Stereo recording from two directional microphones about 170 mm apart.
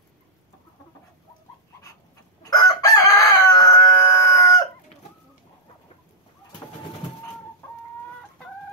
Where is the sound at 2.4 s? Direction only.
20° left (ahead or behind).